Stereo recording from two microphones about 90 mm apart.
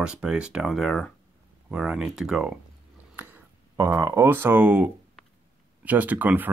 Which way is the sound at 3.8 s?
30° right (ahead or behind).